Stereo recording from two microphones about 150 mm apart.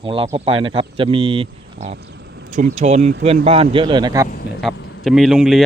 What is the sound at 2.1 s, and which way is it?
Speech, 55° right (ahead or behind).